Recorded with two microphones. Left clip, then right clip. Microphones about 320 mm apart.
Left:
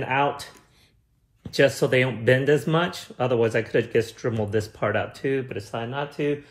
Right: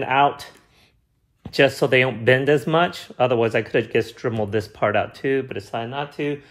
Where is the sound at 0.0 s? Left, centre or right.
Right.